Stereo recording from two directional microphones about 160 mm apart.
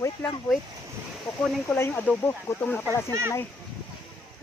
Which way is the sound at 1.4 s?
5° left (ahead or behind).